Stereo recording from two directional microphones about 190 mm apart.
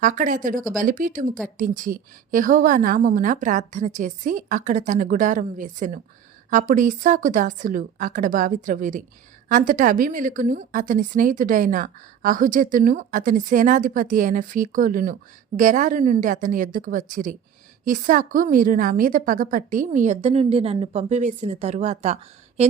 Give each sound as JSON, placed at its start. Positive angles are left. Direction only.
{"t": 0.0, "sound": "a woman's voice", "side_deg": -45}